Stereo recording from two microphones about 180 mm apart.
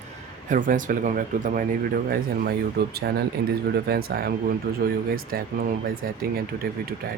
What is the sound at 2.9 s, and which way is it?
Speech, 60° right (ahead or behind).